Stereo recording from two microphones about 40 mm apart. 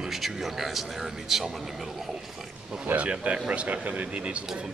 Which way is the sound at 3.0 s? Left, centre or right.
Right.